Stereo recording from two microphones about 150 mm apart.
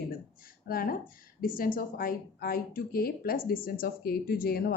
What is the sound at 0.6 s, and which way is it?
Speech, 75° left (ahead or behind).